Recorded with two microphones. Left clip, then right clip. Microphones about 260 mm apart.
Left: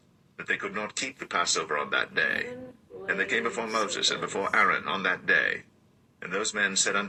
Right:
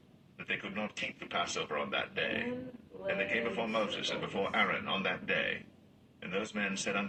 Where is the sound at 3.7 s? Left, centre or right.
Left.